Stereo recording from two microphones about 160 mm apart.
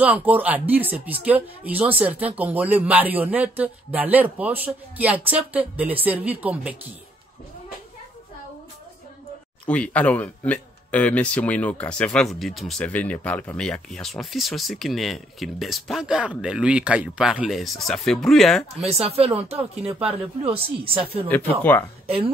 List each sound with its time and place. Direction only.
0.0 s speech: 10° right (ahead or behind)
9.7 s speech: 10° left (ahead or behind)
18.9 s speech: 40° right (ahead or behind)
21.3 s speech: 10° left (ahead or behind)
22.0 s speech: 35° right (ahead or behind)